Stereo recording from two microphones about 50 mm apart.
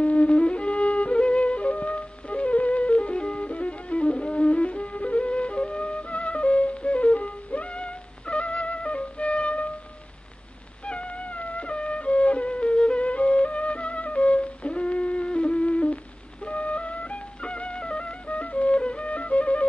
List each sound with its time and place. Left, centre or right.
0.0 s music: left
10.9 s music: left